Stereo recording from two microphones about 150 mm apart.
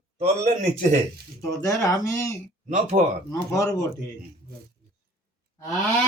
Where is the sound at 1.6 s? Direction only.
20° left (ahead or behind).